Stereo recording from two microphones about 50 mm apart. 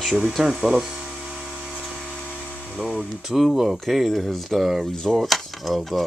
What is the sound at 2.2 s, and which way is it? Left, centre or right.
Electric toothbrush, left.